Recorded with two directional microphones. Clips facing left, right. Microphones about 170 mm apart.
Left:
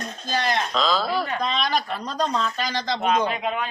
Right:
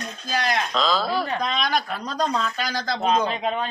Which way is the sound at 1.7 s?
10° left (ahead or behind).